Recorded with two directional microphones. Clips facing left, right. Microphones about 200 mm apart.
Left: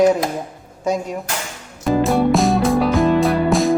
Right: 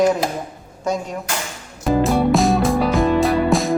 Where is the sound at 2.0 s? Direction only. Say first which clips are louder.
Left 1 dB; centre (ahead or behind).